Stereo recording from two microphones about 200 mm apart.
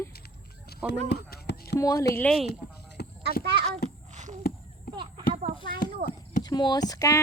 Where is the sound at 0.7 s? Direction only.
50° left (ahead or behind).